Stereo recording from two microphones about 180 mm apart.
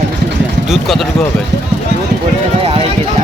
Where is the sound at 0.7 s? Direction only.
Centre (ahead or behind).